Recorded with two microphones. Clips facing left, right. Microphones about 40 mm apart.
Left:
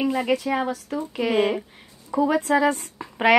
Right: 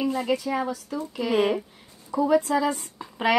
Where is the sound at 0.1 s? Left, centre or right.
Left.